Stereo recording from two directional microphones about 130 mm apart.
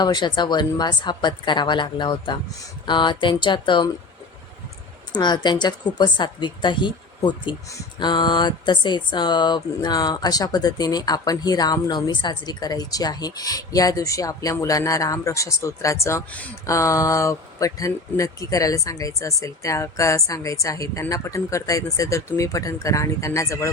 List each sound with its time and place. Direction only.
0.0 s a woman's voice: 35° left (ahead or behind)
5.1 s a woman's voice: 35° left (ahead or behind)